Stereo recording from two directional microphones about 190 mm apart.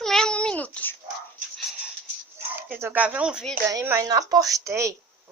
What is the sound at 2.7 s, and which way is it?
Speech, 10° right (ahead or behind).